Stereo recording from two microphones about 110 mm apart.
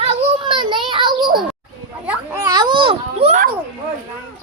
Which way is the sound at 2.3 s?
35° right (ahead or behind).